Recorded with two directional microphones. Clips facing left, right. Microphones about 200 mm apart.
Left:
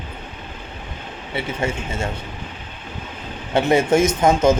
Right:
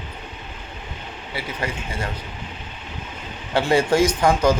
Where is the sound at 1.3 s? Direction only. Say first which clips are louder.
Left 5 dB; 25° left (ahead or behind).